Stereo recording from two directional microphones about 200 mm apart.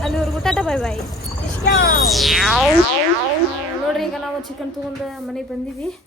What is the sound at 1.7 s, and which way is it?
Speech, 50° left (ahead or behind).